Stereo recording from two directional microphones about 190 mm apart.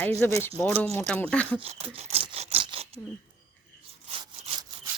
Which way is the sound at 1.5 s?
30° right (ahead or behind).